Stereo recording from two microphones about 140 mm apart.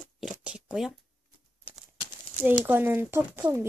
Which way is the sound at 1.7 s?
10° right (ahead or behind).